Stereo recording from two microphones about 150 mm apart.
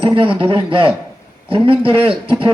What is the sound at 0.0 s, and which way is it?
A man's voice, 35° right (ahead or behind).